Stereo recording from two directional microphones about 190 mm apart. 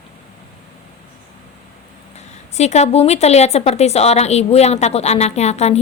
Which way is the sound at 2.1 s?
35° left (ahead or behind).